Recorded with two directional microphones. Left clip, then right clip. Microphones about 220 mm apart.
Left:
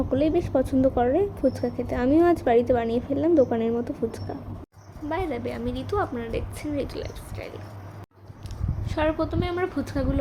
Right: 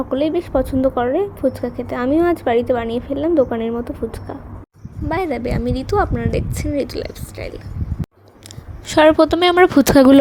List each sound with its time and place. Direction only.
0.1 s a woman's voice: 10° right (ahead or behind)
5.0 s a woman's voice: 30° right (ahead or behind)
8.9 s speech: 40° right (ahead or behind)